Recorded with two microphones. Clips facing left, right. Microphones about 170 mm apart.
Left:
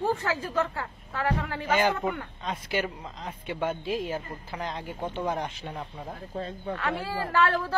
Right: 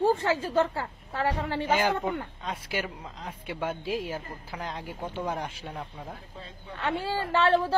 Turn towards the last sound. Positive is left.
turn(degrees=-30)  # may be behind; listen again after turning